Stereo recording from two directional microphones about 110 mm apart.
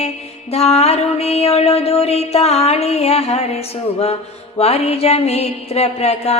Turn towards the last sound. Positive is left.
turn(degrees=70)  # may be behind; listen again after turning